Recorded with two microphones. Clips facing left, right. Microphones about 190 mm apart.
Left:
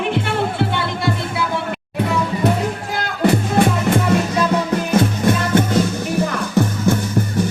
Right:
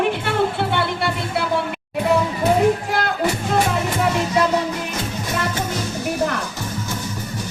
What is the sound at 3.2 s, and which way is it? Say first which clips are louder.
Music: left 8 dB; 55° left (ahead or behind).